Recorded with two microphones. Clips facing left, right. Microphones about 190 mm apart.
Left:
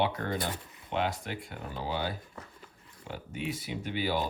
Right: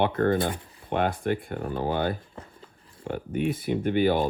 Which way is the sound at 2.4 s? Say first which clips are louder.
Right 4 dB; 25° right (ahead or behind).